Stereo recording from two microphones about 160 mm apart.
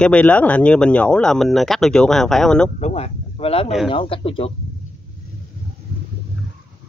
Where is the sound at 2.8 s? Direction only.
40° left (ahead or behind).